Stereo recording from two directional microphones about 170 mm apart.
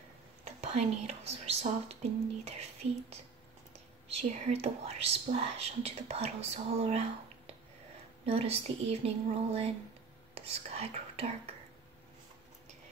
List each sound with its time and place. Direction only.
0.6 s whispering: 40° right (ahead or behind)
2.4 s speech: 40° right (ahead or behind)
4.2 s speech: 40° right (ahead or behind)
8.3 s speech: 35° right (ahead or behind)